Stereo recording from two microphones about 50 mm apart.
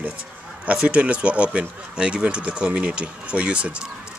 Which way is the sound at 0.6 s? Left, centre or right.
Right.